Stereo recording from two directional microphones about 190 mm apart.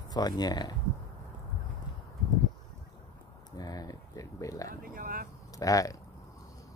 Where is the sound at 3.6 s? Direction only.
20° left (ahead or behind).